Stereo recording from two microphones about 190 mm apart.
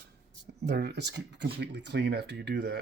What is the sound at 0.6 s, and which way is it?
Speech, 60° right (ahead or behind).